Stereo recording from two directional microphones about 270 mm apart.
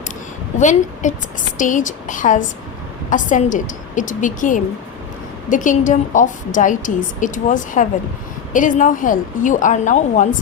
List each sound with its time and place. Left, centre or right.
0.6 s a woman's voice: left